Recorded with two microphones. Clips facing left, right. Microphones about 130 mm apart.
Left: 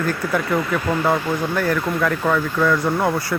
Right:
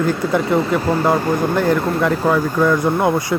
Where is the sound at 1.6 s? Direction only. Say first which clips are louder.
Right 4 dB; 20° right (ahead or behind).